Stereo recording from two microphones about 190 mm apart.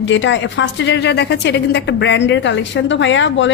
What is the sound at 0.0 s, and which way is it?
A woman's voice, 75° left (ahead or behind).